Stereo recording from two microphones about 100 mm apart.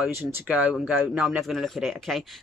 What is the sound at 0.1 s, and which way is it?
Speech, 20° right (ahead or behind).